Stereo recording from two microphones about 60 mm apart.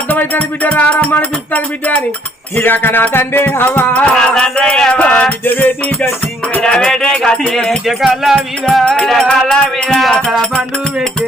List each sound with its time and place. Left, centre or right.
0.1 s music: left
3.9 s music: centre
6.6 s music: centre
7.9 s speech: centre
8.8 s music: centre